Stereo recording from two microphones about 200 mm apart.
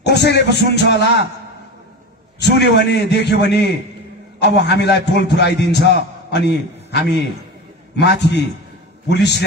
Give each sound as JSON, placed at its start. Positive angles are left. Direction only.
{"t": 0.0, "sound": "a man's voice", "side_deg": 55}
{"t": 2.4, "sound": "a man's voice", "side_deg": 55}